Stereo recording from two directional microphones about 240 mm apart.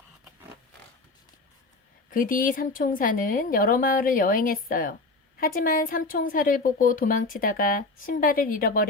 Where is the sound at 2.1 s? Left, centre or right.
Left.